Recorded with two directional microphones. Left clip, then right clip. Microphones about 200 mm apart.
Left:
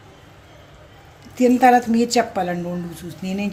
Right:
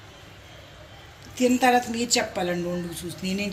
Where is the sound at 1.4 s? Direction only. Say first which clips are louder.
Left 6 dB; 50° left (ahead or behind).